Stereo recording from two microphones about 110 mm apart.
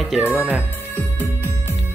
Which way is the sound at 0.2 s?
15° right (ahead or behind).